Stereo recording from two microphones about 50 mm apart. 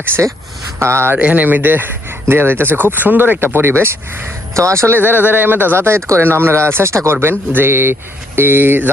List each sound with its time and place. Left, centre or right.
0.1 s speech: left
0.8 s speech: right
1.1 s speech: right
4.5 s speech: right
4.9 s speech: right
5.7 s speech: right
7.2 s speech: right